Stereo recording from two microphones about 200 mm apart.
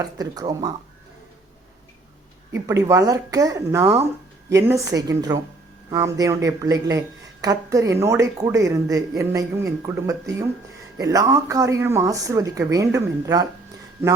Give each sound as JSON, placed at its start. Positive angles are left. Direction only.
{"t": 0.0, "sound": "speech", "side_deg": -20}
{"t": 2.5, "sound": "a woman's voice", "side_deg": -15}